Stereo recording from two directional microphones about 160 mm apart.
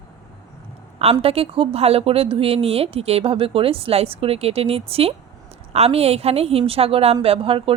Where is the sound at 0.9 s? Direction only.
40° right (ahead or behind).